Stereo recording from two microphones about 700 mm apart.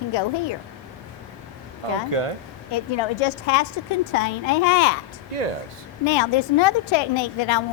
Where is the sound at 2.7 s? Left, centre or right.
Left.